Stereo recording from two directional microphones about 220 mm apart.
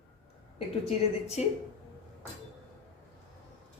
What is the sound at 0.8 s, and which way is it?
Speech, 30° left (ahead or behind).